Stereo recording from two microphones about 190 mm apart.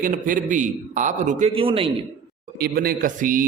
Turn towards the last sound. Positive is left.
turn(degrees=-45)  # may be behind; listen again after turning